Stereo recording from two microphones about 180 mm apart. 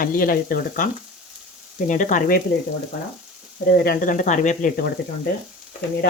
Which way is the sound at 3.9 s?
50° left (ahead or behind).